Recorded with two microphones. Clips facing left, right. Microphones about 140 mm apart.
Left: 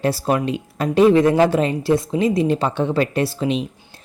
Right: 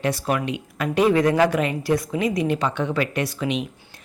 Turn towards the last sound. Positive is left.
turn(degrees=30)  # may be behind; listen again after turning